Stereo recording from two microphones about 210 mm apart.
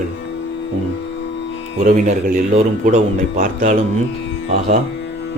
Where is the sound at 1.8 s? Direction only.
40° right (ahead or behind).